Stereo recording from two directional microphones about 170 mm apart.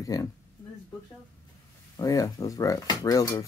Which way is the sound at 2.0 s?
20° left (ahead or behind).